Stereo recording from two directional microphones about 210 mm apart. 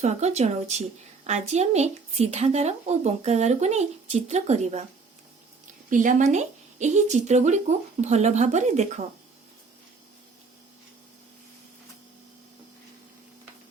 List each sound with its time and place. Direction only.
0.0 s speech: 30° right (ahead or behind)
5.9 s speech: 35° right (ahead or behind)